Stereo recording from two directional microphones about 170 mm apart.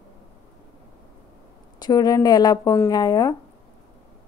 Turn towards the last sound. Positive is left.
turn(degrees=20)  # may be behind; listen again after turning